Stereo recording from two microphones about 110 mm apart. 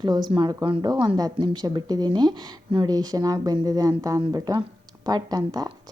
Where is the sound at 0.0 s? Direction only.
40° right (ahead or behind).